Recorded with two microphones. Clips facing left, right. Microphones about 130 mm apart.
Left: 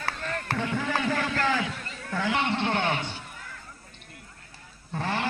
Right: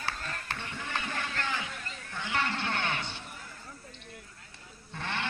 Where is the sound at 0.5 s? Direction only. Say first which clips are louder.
Left 11 dB; 90° left.